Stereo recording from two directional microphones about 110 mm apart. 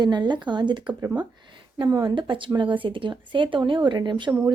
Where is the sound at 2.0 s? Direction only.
45° right (ahead or behind).